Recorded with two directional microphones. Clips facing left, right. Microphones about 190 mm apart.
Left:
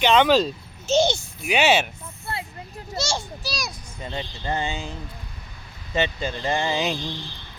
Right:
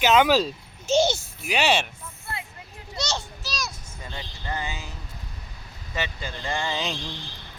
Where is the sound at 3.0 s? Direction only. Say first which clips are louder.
Left 3 dB; 10° left (ahead or behind); by 4.9 s 25° left (ahead or behind).